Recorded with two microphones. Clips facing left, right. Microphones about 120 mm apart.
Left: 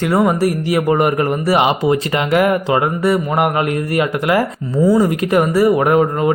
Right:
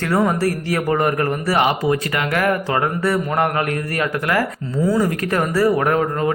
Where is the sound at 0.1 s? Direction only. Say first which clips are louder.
Left 2 dB; 15° left (ahead or behind).